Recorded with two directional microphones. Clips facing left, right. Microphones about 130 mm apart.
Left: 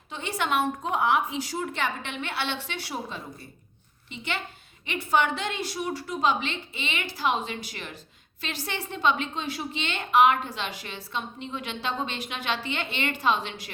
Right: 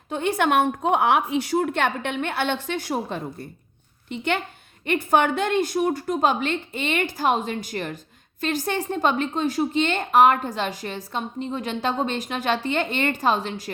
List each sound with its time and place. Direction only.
0.1 s a woman's voice: 55° right (ahead or behind)